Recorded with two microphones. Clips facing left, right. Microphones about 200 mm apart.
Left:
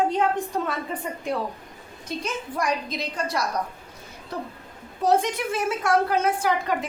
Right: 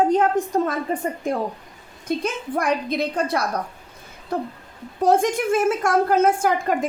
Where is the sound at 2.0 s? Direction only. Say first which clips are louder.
Right 6 dB; 55° right (ahead or behind).